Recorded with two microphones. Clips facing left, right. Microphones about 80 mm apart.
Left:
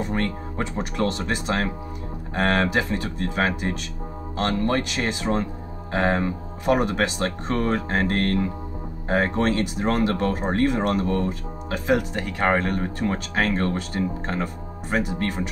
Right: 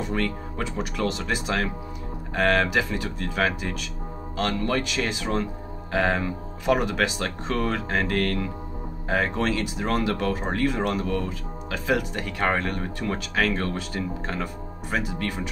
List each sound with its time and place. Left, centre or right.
0.0 s speech: left